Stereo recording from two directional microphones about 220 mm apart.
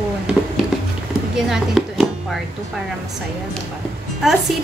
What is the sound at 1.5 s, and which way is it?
Speech, 5° right (ahead or behind).